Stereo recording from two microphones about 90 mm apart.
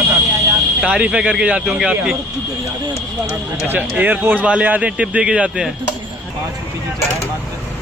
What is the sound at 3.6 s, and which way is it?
Speech, 20° right (ahead or behind).